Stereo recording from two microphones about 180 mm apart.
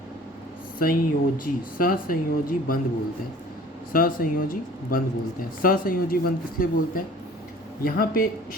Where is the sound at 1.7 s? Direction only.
50° left (ahead or behind).